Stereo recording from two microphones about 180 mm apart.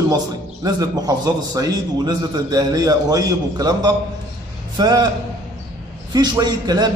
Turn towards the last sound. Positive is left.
turn(degrees=-20)  # may be behind; listen again after turning